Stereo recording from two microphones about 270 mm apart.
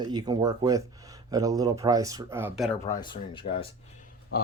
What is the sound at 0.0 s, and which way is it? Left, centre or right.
Speech, centre.